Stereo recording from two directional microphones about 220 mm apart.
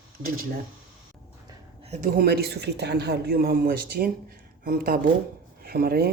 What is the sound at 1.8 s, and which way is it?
A woman's voice, 35° right (ahead or behind).